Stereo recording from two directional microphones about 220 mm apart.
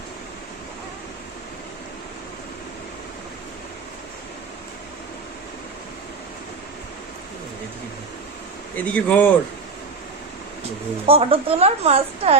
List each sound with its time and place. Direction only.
8.7 s speech: 5° left (ahead or behind)
11.0 s a woman's voice: 25° right (ahead or behind)